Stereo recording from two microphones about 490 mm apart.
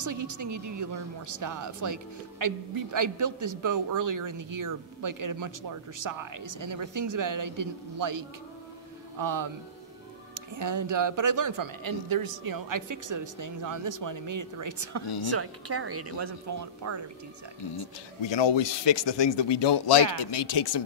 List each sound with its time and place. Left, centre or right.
0.0 s speech: right
18.2 s speech: left